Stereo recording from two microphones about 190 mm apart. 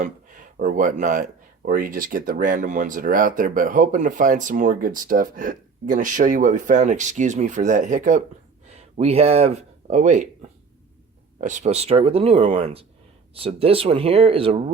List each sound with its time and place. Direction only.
0.0 s speech: 45° right (ahead or behind)
11.3 s speech: 40° right (ahead or behind)